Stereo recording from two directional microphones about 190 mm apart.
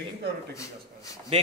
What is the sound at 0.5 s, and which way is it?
Speech, 15° left (ahead or behind).